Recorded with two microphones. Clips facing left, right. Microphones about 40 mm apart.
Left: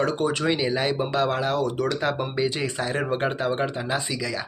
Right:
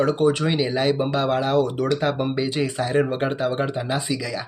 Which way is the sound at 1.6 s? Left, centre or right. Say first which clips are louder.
Right 3 dB; centre.